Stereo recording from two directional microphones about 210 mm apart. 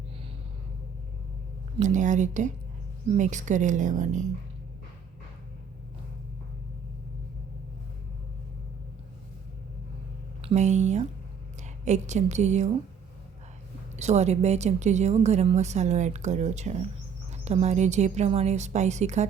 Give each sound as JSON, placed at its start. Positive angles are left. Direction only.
{"t": 1.8, "sound": "a woman's voice", "side_deg": -35}
{"t": 10.4, "sound": "a woman's voice", "side_deg": -35}
{"t": 13.9, "sound": "a woman's voice", "side_deg": -30}